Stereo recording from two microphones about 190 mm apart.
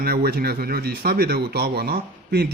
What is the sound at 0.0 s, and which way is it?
Speech, 55° right (ahead or behind).